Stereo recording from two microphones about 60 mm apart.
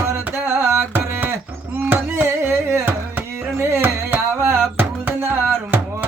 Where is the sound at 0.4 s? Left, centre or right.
Right.